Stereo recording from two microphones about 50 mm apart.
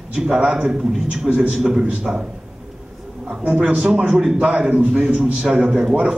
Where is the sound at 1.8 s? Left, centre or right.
Centre.